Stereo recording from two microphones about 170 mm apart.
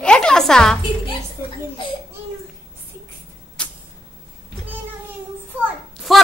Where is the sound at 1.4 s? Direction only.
15° right (ahead or behind).